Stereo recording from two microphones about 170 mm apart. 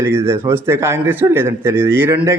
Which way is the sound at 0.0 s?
15° right (ahead or behind).